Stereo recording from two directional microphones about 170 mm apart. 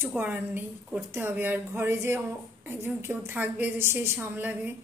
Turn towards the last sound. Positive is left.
turn(degrees=-10)  # may be behind; listen again after turning